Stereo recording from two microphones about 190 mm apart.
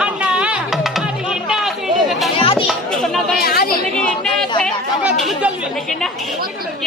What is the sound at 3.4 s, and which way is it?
Speech, 50° left (ahead or behind).